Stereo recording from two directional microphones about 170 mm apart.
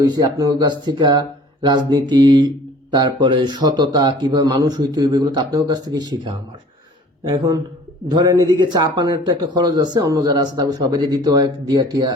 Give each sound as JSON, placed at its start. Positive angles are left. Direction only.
{"t": 0.0, "sound": "speech", "side_deg": -20}